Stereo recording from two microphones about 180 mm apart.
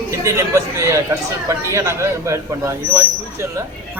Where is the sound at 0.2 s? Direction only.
15° right (ahead or behind).